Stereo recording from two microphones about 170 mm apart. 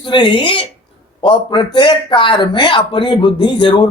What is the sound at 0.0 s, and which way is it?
Speech, 30° left (ahead or behind).